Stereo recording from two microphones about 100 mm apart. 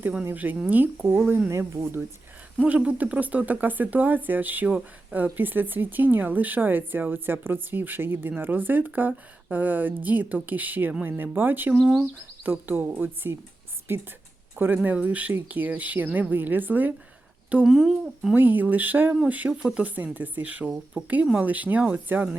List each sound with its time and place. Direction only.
0.3 s speech: 20° right (ahead or behind)
2.6 s speech: 15° right (ahead or behind)
17.7 s speech: 5° right (ahead or behind)
18.3 s speech: 20° right (ahead or behind)